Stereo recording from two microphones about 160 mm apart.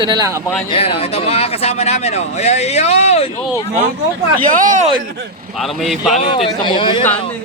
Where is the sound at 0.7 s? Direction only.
35° left (ahead or behind).